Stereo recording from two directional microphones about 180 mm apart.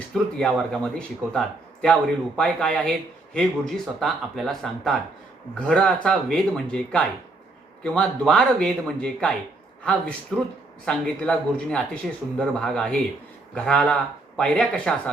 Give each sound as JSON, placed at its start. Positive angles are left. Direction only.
{"t": 0.1, "sound": "speech", "side_deg": 0}